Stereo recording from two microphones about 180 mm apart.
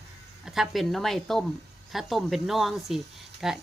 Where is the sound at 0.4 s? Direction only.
Centre (ahead or behind).